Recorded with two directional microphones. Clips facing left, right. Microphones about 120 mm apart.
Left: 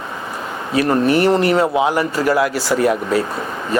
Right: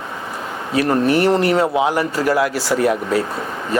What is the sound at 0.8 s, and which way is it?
Speech, 15° left (ahead or behind).